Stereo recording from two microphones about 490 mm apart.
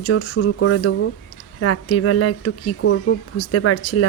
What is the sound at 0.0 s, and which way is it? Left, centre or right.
Speech, left.